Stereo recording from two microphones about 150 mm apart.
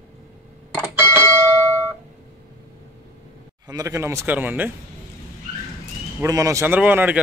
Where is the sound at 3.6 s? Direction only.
20° right (ahead or behind).